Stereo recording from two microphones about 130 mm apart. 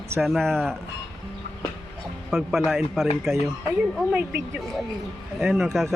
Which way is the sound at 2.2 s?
Centre (ahead or behind).